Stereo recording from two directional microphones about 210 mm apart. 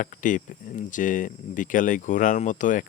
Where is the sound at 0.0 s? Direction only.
40° left (ahead or behind).